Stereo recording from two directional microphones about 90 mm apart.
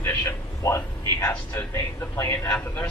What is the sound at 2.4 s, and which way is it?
Speech, 15° left (ahead or behind).